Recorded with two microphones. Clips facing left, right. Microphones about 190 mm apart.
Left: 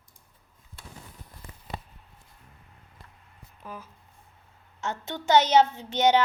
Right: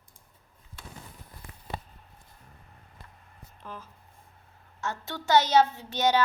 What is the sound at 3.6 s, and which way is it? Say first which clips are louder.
Speech: left 1 dB; 10° left (ahead or behind).